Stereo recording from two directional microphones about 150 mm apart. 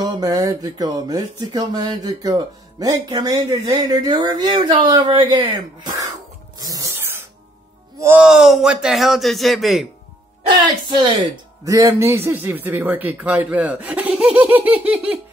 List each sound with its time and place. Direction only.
0.0 s speech: 25° right (ahead or behind)
6.6 s a sound: 25° right (ahead or behind)
8.2 s a man's voice: 5° right (ahead or behind)
10.9 s a man's voice: 30° right (ahead or behind); by 15.1 s 10° right (ahead or behind)